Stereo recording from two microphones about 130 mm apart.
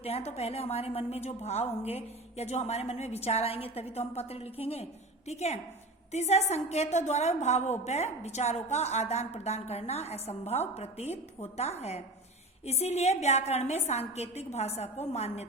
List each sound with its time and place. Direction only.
0.0 s a woman's voice: 55° left (ahead or behind)